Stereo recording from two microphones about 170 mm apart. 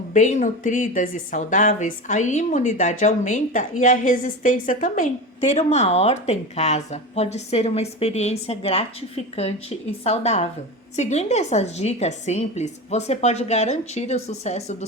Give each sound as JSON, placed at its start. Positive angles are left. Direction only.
{"t": 0.1, "sound": "a woman's voice", "side_deg": 45}